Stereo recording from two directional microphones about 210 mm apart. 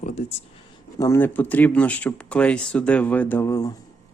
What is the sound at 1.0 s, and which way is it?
Speech, 10° left (ahead or behind).